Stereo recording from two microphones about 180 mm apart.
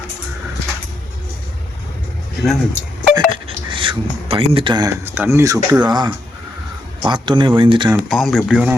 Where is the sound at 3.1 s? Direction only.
30° right (ahead or behind).